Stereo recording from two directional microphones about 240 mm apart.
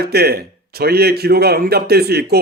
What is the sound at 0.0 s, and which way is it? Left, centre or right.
Speech, right.